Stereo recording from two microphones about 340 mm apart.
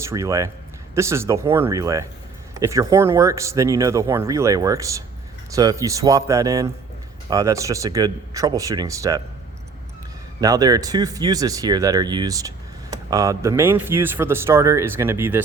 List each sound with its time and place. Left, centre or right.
0.0 s speech: centre
10.4 s speech: centre